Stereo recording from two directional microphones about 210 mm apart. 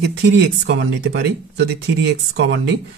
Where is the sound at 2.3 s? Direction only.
55° right (ahead or behind).